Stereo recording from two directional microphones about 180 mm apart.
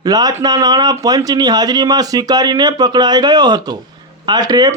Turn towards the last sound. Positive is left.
turn(degrees=-20)  # may be behind; listen again after turning